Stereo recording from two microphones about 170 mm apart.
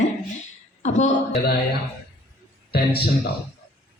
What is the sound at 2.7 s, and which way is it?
Speech, 70° left (ahead or behind).